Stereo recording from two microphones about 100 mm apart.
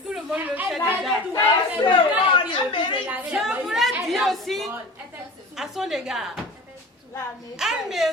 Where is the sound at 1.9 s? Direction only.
55° left (ahead or behind).